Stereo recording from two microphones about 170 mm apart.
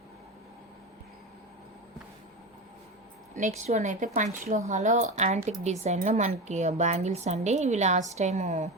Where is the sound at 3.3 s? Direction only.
45° right (ahead or behind).